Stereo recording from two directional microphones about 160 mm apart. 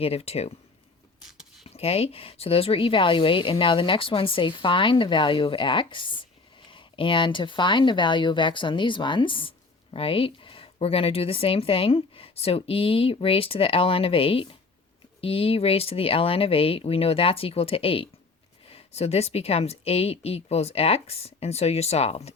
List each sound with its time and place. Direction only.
0.0 s speech: 40° left (ahead or behind)
1.6 s speech: 40° left (ahead or behind)